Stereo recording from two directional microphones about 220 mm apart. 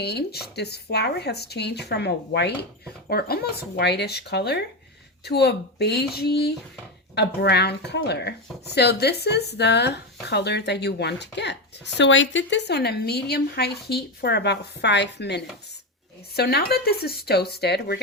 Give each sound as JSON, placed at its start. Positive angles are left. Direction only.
{"t": 0.0, "sound": "speech", "side_deg": 50}